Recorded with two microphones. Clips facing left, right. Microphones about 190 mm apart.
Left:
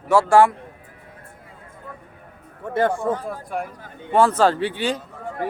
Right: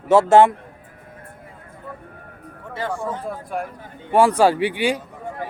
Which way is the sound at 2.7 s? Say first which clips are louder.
Left 6 dB; 55° left (ahead or behind).